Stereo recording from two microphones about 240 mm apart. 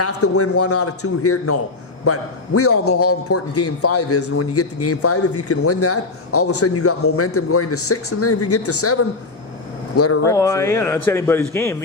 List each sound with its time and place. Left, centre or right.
0.0 s a man's voice: left
9.9 s speech: left
10.2 s a man's voice: centre